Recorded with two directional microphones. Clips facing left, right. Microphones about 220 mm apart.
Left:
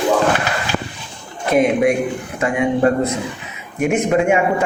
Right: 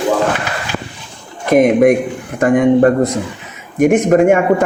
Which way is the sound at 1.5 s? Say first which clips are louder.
Right 5 dB; 50° right (ahead or behind).